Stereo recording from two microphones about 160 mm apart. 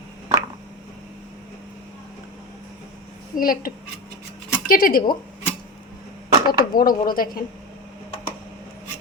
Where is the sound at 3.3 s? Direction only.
65° left (ahead or behind).